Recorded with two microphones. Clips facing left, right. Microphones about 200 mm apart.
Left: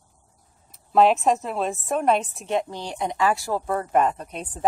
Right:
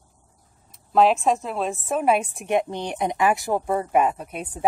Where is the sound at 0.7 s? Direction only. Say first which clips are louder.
Even; centre (ahead or behind).